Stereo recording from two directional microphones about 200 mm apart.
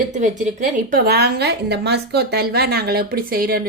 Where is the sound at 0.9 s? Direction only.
50° right (ahead or behind).